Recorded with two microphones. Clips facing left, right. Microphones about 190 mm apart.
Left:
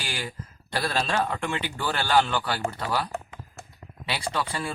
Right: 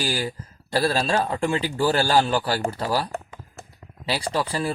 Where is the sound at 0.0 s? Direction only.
35° right (ahead or behind).